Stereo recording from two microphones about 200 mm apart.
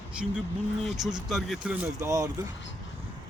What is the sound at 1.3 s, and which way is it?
Speech, centre (ahead or behind).